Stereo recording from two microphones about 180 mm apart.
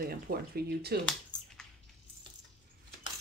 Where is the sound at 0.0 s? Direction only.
55° right (ahead or behind).